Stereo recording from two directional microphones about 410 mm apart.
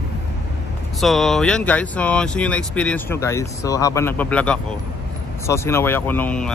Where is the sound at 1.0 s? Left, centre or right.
Centre.